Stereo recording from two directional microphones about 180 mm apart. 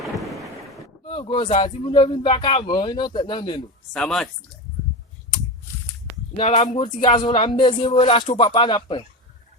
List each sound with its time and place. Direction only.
0.0 s thunder: centre (ahead or behind)
1.0 s speech: 30° left (ahead or behind)
3.9 s speech: centre (ahead or behind)
6.3 s speech: 30° left (ahead or behind)